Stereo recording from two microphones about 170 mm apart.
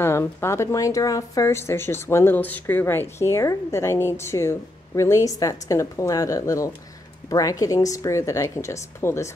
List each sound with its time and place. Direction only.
0.0 s speech: 15° left (ahead or behind)